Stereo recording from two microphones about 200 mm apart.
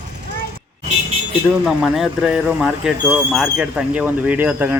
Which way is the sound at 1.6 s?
Centre (ahead or behind).